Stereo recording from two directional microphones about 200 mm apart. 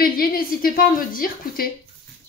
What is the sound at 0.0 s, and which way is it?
A woman's voice, 45° left (ahead or behind).